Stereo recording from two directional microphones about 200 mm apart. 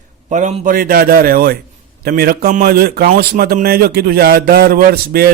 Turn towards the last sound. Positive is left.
turn(degrees=-50)  # may be behind; listen again after turning